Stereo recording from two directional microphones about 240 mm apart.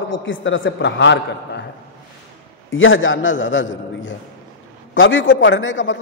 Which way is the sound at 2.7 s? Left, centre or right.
Left.